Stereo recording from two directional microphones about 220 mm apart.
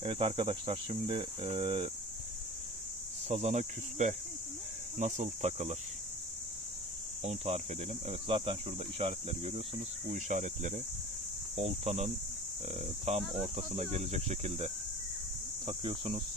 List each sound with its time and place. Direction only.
0.0 s speech: 25° right (ahead or behind)
3.3 s speech: 30° right (ahead or behind)
7.2 s speech: 30° right (ahead or behind)